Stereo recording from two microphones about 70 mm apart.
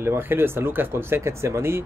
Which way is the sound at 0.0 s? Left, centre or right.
Right.